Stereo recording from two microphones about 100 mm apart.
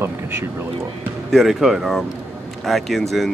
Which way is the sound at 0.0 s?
25° right (ahead or behind).